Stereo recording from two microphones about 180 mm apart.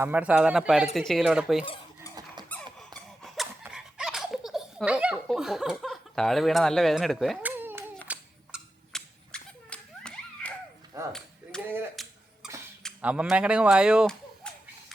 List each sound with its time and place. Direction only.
0.0 s speech: 10° right (ahead or behind)
2.5 s squeak: 10° left (ahead or behind)
3.6 s belly laugh: 5° right (ahead or behind)
7.5 s clapping: 10° right (ahead or behind)
8.9 s whip: 5° left (ahead or behind)
10.9 s a sound: 20° right (ahead or behind)
12.0 s a sound: centre (ahead or behind)
13.0 s speech: 5° right (ahead or behind)